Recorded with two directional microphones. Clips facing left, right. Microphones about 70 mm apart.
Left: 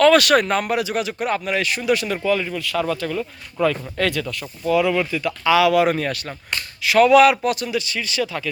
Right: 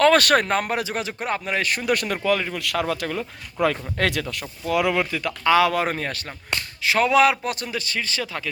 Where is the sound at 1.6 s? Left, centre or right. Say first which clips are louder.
Left 2 dB; right.